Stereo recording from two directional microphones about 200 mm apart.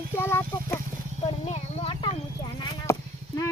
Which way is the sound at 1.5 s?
30° left (ahead or behind).